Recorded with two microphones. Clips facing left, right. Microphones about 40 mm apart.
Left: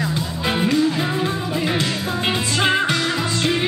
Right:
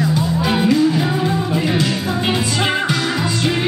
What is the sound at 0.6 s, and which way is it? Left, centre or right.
Music, centre.